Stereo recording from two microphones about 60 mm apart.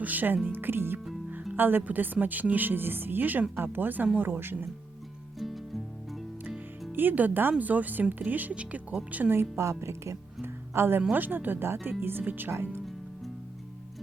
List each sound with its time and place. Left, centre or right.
0.0 s speech: right
5.4 s music: centre
6.9 s speech: right
9.3 s speech: right
12.5 s speech: right